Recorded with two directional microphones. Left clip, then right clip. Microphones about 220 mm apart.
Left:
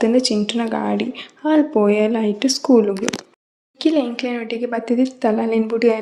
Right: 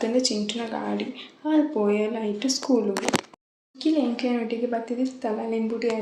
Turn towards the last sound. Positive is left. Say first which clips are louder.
# left 9 dB
turn(degrees=50)  # may be behind; listen again after turning